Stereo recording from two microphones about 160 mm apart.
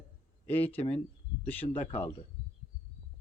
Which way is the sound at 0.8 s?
40° left (ahead or behind).